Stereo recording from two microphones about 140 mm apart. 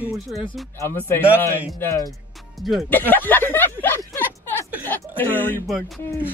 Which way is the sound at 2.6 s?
Centre (ahead or behind).